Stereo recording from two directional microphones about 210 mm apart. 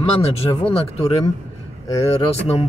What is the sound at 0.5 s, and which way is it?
A man's voice, 25° left (ahead or behind).